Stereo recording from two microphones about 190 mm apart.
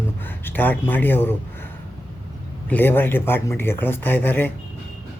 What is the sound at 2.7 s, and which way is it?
Speech, 10° left (ahead or behind).